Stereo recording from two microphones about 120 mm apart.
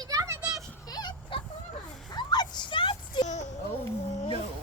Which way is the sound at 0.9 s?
35° left (ahead or behind).